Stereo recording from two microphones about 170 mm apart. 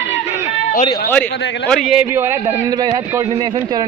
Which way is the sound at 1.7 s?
Centre (ahead or behind).